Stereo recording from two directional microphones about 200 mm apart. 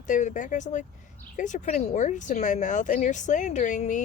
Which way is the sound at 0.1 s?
40° left (ahead or behind).